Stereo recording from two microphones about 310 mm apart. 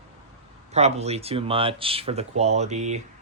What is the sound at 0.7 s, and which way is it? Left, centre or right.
Speech, right.